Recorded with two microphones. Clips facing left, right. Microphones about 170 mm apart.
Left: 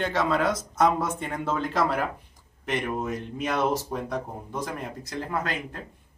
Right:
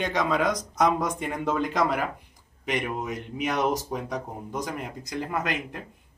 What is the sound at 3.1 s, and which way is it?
Speech, 15° right (ahead or behind).